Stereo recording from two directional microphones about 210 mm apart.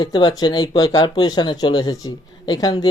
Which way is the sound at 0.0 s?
20° left (ahead or behind).